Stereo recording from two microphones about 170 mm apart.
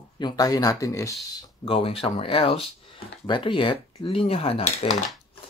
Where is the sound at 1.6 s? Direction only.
35° left (ahead or behind).